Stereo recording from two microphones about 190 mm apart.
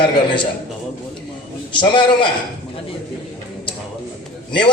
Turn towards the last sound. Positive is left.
turn(degrees=25)  # may be behind; listen again after turning